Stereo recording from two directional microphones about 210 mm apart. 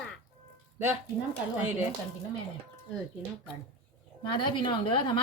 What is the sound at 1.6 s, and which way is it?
Speech, 10° right (ahead or behind).